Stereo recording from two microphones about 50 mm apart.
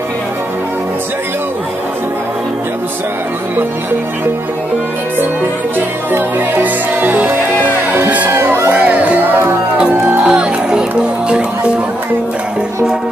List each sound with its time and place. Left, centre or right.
5.8 s music: right
8.7 s music: right